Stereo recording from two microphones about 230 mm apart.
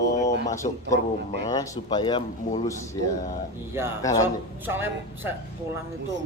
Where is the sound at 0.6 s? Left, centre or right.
Left.